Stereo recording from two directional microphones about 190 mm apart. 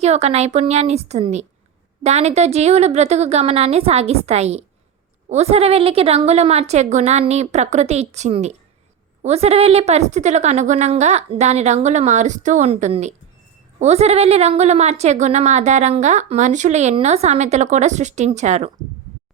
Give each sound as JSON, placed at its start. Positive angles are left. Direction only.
{"t": 0.0, "sound": "a woman's voice", "side_deg": -35}